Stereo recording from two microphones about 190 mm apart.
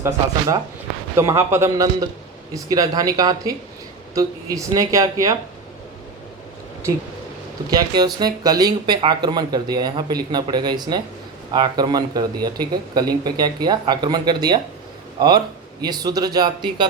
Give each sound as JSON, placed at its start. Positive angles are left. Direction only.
{"t": 0.0, "sound": "speech", "side_deg": -20}
{"t": 7.7, "sound": "speech", "side_deg": -20}
{"t": 15.8, "sound": "speech", "side_deg": -20}